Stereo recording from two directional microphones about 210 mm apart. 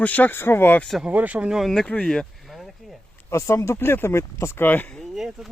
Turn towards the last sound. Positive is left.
turn(degrees=0)  # may be behind; listen again after turning